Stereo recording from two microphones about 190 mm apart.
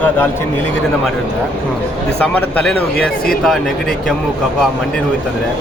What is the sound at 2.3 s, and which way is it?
A man's voice, 5° left (ahead or behind).